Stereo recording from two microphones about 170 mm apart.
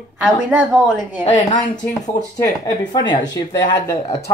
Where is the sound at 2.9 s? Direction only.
25° left (ahead or behind).